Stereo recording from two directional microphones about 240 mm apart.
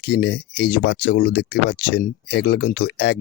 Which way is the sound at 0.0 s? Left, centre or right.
Left.